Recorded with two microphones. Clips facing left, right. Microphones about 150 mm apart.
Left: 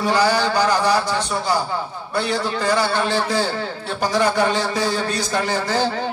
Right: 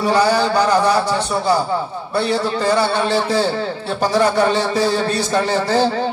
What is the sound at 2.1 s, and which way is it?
A man's voice, 30° right (ahead or behind).